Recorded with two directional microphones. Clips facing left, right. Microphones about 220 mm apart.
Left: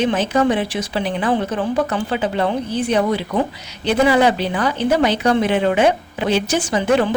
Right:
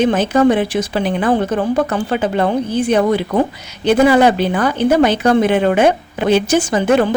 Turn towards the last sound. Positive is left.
turn(degrees=-45)  # may be behind; listen again after turning